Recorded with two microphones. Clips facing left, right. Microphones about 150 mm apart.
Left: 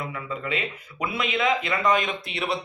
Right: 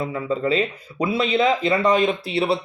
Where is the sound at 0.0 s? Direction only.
30° right (ahead or behind).